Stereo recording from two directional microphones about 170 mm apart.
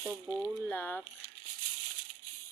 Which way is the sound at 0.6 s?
10° left (ahead or behind).